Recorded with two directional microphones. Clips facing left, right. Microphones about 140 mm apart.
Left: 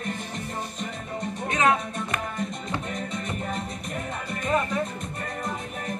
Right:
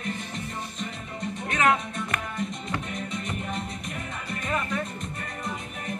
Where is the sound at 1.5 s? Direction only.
20° left (ahead or behind).